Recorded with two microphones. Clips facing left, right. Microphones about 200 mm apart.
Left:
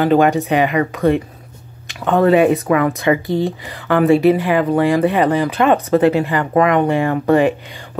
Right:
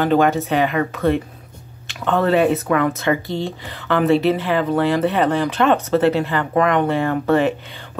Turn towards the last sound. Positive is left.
turn(degrees=15)  # may be behind; listen again after turning